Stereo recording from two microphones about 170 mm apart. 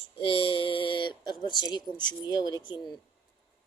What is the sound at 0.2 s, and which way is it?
Speech, 30° left (ahead or behind).